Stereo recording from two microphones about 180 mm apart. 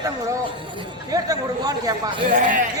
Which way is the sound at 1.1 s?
20° right (ahead or behind).